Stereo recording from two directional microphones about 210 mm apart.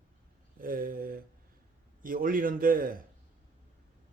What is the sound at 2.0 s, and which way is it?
Speech, 40° right (ahead or behind).